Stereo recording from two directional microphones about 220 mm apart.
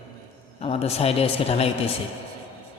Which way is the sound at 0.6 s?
25° left (ahead or behind).